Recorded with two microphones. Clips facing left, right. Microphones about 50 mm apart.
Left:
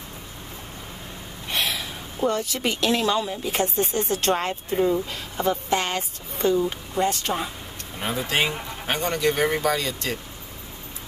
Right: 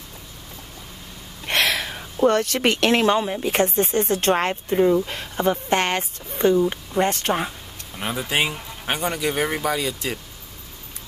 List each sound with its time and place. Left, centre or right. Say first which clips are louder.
1.4 s a sound: right 6 dB; right
2.2 s speech: right 6 dB; right
3.2 s speech: right 3 dB; right
3.4 s speech: right 4 dB; right
4.6 s speech: right 4 dB; centre
5.0 s speech: right 3 dB; right
8.0 s speech: right 1 dB; centre